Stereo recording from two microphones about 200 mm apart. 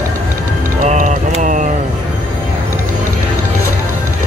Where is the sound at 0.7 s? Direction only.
40° right (ahead or behind).